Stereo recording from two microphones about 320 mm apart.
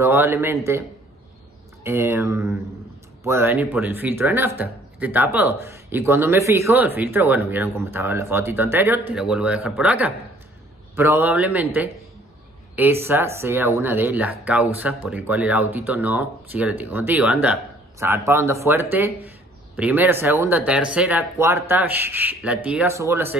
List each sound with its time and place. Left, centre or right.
0.0 s speech: centre
1.8 s speech: centre